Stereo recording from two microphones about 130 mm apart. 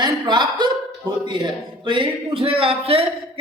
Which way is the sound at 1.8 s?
40° right (ahead or behind).